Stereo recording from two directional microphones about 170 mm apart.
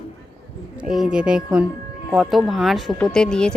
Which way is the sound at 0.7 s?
5° right (ahead or behind).